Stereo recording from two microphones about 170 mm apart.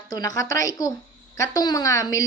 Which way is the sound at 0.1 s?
20° left (ahead or behind).